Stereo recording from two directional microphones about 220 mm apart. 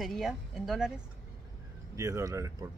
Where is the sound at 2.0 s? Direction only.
15° right (ahead or behind).